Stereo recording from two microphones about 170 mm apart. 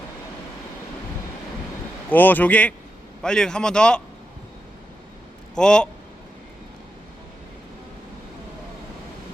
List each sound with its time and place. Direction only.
2.0 s a man's voice: 10° left (ahead or behind)
5.5 s a man's voice: 5° left (ahead or behind)